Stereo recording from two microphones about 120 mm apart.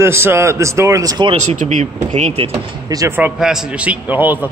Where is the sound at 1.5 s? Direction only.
85° right; by 2.6 s 60° right (ahead or behind).